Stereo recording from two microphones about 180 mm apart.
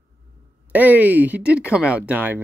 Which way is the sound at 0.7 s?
10° right (ahead or behind).